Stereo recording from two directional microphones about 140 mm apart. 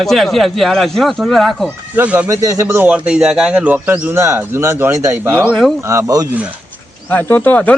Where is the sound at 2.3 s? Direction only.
25° right (ahead or behind).